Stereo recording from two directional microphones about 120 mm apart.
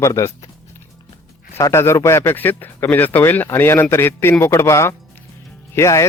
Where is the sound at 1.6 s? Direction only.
25° left (ahead or behind).